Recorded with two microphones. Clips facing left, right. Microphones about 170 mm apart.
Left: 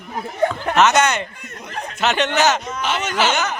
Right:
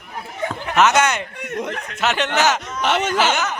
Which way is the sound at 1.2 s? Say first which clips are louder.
Right 10 dB; 70° right (ahead or behind).